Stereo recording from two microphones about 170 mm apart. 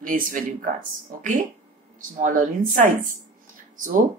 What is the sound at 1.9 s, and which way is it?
Speech, 50° right (ahead or behind).